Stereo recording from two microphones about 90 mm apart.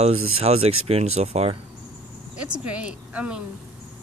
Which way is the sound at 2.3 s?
15° right (ahead or behind).